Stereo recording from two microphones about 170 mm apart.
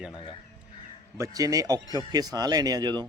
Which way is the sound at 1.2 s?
20° right (ahead or behind).